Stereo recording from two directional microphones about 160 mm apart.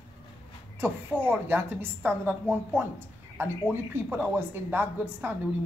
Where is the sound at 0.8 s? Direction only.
15° right (ahead or behind).